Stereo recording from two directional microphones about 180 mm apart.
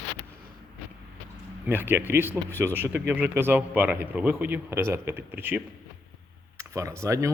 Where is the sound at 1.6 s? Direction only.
10° right (ahead or behind).